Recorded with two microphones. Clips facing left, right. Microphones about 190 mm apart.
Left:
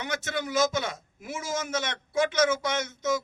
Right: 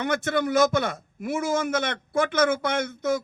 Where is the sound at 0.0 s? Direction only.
55° right (ahead or behind).